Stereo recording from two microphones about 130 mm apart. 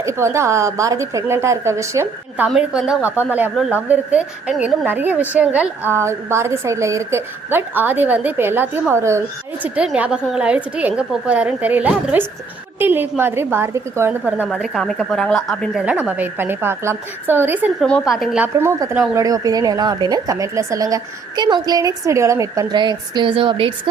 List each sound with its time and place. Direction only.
0.0 s speech: 20° right (ahead or behind)
2.5 s a woman's voice: 5° right (ahead or behind); by 9.2 s 20° right (ahead or behind)
9.6 s a woman's voice: 10° right (ahead or behind)
14.6 s a woman's voice: centre (ahead or behind); by 17.7 s 15° right (ahead or behind)
17.7 s a woman's voice: 10° left (ahead or behind)
18.4 s speech: 20° right (ahead or behind); by 23.9 s 40° right (ahead or behind)